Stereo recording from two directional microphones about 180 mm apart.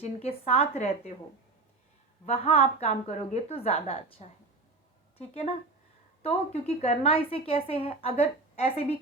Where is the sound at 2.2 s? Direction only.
35° left (ahead or behind).